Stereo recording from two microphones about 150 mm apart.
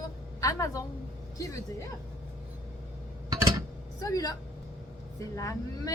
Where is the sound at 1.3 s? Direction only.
20° left (ahead or behind).